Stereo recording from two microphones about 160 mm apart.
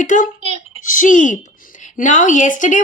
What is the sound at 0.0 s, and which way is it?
Speech, 55° left (ahead or behind).